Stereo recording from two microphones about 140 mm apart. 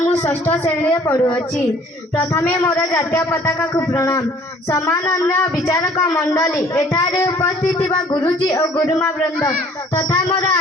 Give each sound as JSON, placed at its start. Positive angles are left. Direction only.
{"t": 0.0, "sound": "a woman's voice", "side_deg": 15}